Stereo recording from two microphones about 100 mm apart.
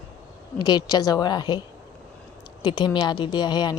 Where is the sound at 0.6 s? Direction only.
40° left (ahead or behind).